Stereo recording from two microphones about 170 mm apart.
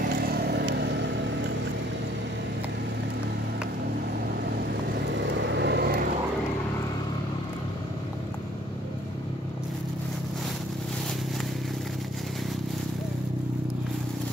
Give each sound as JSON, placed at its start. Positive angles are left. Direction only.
{"t": 0.0, "sound": "vehicle", "side_deg": -65}
{"t": 5.3, "sound": "vehicle", "side_deg": -90}